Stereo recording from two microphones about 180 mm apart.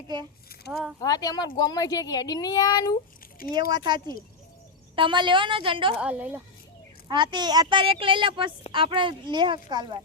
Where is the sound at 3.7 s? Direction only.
25° right (ahead or behind).